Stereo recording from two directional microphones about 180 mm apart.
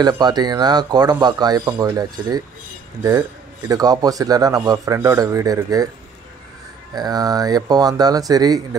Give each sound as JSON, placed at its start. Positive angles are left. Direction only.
{"t": 0.0, "sound": "a man's voice", "side_deg": -25}
{"t": 7.0, "sound": "a man's voice", "side_deg": -20}